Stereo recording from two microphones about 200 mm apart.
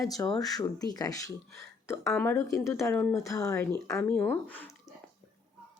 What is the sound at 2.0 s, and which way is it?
Speech, 5° left (ahead or behind).